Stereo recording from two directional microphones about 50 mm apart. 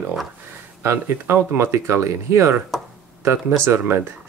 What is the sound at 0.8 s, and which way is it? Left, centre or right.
Speech, right.